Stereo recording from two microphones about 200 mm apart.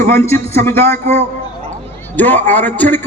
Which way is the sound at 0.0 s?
10° left (ahead or behind).